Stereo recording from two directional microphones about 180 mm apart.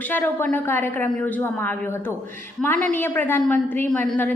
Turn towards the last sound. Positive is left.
turn(degrees=10)  # may be behind; listen again after turning